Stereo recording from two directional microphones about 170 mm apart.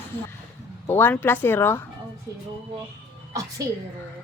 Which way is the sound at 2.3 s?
20° right (ahead or behind).